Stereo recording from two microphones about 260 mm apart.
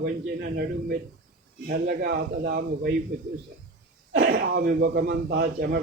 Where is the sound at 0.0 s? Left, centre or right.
Right.